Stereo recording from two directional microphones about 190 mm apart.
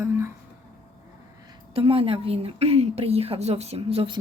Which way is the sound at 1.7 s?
30° right (ahead or behind).